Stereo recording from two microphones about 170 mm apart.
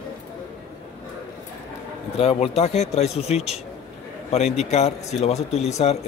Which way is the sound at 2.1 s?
35° left (ahead or behind).